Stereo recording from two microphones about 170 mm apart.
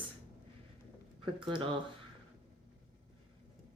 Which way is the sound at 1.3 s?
30° right (ahead or behind).